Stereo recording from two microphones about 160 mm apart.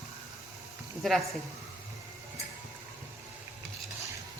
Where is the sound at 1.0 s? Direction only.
Centre (ahead or behind).